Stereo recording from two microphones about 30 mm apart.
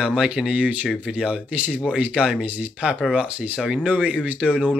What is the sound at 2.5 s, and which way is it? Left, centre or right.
Speech, right.